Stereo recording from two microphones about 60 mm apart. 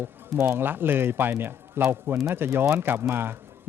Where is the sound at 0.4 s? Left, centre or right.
Right.